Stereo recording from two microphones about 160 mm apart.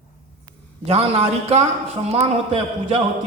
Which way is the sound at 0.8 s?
40° right (ahead or behind).